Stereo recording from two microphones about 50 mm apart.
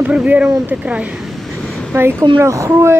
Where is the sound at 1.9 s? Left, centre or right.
Right.